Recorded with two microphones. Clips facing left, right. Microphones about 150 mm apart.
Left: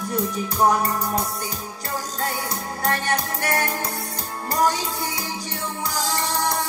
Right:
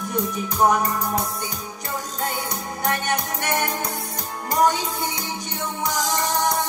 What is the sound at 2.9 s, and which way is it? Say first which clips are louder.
Music: even; 20° right (ahead or behind).